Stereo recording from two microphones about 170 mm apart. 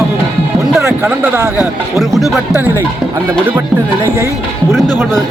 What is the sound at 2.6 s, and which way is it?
Speech, 10° right (ahead or behind).